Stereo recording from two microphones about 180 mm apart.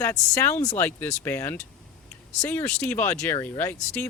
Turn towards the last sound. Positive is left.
turn(degrees=10)  # may be behind; listen again after turning